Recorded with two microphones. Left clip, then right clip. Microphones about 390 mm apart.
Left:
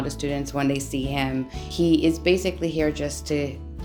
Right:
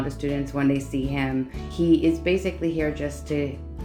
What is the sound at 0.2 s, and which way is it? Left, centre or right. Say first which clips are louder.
Speech: even; centre.